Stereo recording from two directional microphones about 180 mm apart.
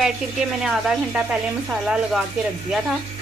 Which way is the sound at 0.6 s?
5° right (ahead or behind).